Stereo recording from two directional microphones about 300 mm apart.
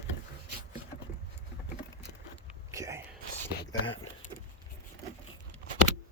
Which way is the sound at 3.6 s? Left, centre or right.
Centre.